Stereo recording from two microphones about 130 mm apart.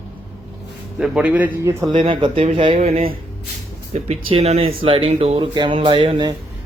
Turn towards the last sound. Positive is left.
turn(degrees=-35)  # may be behind; listen again after turning